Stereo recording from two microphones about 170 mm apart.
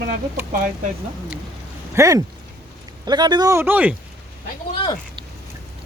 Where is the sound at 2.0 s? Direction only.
20° right (ahead or behind).